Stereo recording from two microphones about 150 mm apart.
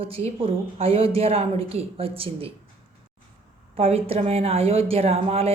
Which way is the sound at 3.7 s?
40° right (ahead or behind).